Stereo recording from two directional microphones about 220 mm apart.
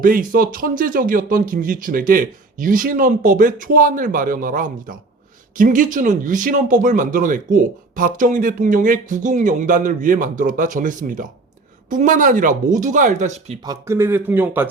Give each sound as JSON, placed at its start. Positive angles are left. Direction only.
{"t": 0.0, "sound": "speech", "side_deg": -40}
{"t": 13.7, "sound": "a man's voice", "side_deg": -10}